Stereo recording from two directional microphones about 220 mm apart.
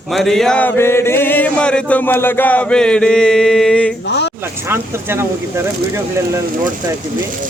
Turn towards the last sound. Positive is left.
turn(degrees=-10)  # may be behind; listen again after turning